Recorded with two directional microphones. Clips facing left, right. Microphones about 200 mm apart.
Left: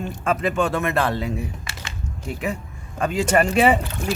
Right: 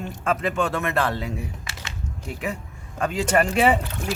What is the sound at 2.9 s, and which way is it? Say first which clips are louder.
Speech: left 2 dB; 10° left (ahead or behind).